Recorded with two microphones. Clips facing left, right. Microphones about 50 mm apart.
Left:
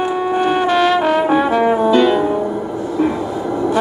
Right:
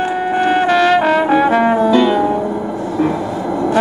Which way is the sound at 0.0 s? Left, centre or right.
Right.